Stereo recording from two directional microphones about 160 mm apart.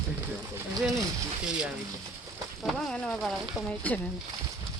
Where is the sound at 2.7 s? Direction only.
Centre (ahead or behind).